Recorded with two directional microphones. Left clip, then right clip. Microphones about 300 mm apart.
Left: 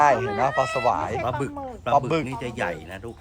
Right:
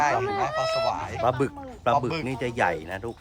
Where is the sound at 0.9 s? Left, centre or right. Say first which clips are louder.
Left 5 dB; centre.